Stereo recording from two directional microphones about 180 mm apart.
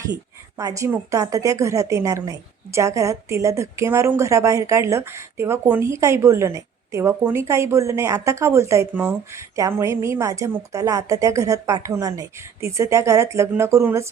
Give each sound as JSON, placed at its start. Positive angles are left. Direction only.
{"t": 0.5, "sound": "a woman's voice", "side_deg": -15}